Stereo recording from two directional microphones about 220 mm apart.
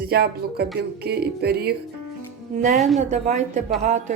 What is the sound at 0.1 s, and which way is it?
Speech, 45° right (ahead or behind).